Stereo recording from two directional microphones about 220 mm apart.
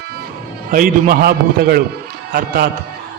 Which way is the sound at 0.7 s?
40° right (ahead or behind).